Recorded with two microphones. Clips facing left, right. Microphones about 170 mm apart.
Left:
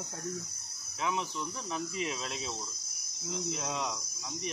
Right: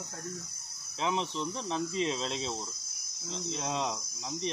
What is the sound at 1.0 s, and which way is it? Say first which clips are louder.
Speech: right 2 dB; 25° right (ahead or behind).